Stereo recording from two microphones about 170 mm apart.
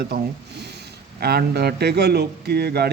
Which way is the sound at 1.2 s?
70° right (ahead or behind).